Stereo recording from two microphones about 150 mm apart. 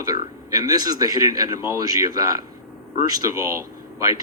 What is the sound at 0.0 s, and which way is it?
Speech, 25° right (ahead or behind).